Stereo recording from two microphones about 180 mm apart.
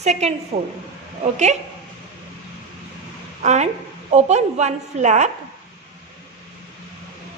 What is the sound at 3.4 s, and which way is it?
A woman's voice, 40° right (ahead or behind).